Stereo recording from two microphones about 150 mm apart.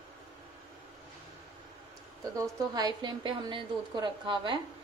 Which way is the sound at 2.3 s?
25° right (ahead or behind).